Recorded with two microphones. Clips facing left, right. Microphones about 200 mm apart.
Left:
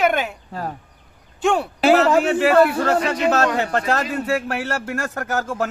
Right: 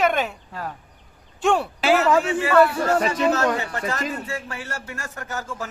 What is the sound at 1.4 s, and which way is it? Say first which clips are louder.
Speech: left 1 dB; centre (ahead or behind).